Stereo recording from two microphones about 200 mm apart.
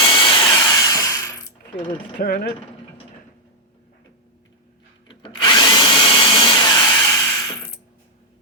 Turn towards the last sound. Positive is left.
turn(degrees=20)  # may be behind; listen again after turning